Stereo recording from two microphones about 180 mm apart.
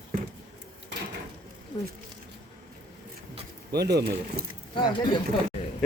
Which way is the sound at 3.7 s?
65° right (ahead or behind).